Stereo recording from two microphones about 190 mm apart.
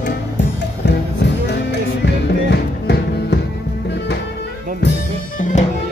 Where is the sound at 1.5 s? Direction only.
65° left (ahead or behind).